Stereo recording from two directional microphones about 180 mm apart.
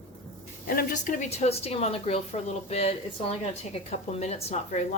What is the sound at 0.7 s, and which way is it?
A woman's voice, 55° left (ahead or behind).